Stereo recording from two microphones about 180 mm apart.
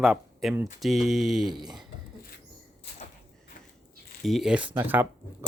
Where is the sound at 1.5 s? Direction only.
25° right (ahead or behind).